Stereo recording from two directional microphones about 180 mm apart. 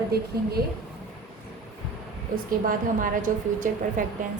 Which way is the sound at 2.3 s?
50° right (ahead or behind).